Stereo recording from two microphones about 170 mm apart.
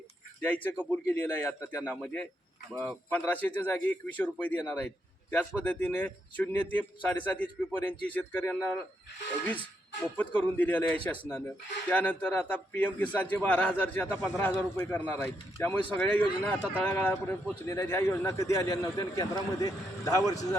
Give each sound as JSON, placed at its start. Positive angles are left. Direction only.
{"t": 0.4, "sound": "speech", "side_deg": 10}
{"t": 10.2, "sound": "speech", "side_deg": 10}